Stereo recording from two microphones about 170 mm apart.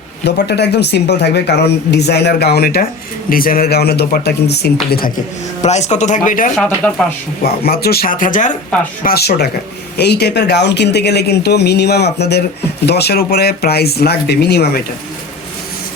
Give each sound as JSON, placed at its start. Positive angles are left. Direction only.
{"t": 0.3, "sound": "speech", "side_deg": 75}
{"t": 5.6, "sound": "speech", "side_deg": 40}
{"t": 6.6, "sound": "speech", "side_deg": 10}
{"t": 7.4, "sound": "speech", "side_deg": 65}
{"t": 9.0, "sound": "speech", "side_deg": 70}